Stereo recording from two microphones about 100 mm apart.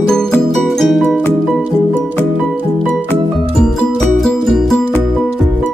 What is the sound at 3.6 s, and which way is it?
Music, 5° left (ahead or behind).